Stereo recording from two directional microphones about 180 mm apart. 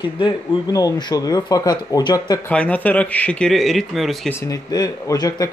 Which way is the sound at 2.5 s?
10° left (ahead or behind).